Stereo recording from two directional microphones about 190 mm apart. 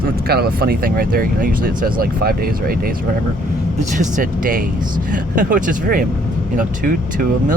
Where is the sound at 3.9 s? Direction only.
40° right (ahead or behind).